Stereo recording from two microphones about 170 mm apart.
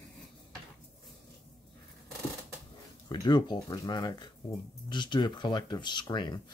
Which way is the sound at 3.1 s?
25° left (ahead or behind).